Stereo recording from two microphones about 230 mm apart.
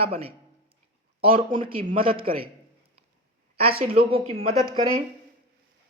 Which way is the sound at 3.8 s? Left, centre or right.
Right.